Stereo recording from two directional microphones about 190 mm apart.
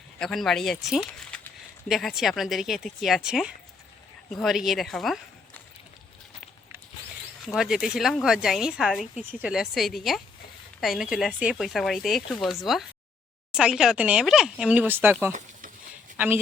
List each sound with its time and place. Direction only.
0.2 s speech: centre (ahead or behind)
7.4 s speech: centre (ahead or behind)
15.3 s a sound: 40° right (ahead or behind)
16.1 s speech: 10° right (ahead or behind)